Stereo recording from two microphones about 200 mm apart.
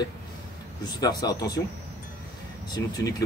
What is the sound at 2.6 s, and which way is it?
Speech, 20° left (ahead or behind).